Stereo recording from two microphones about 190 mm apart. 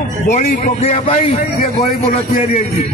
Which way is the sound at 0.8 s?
35° left (ahead or behind).